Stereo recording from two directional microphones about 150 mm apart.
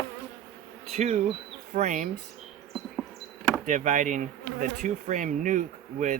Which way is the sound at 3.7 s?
55° right (ahead or behind).